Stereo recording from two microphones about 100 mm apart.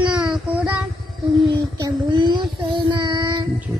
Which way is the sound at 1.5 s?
50° right (ahead or behind).